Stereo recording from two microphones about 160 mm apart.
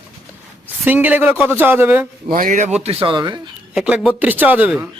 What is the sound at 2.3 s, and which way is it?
Speech, 55° right (ahead or behind).